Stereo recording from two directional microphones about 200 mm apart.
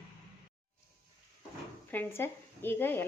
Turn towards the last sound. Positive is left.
turn(degrees=10)  # may be behind; listen again after turning